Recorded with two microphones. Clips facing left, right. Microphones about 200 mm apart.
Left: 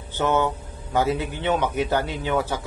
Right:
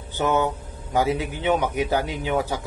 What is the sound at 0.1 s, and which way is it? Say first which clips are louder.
A man's voice: even; 15° right (ahead or behind).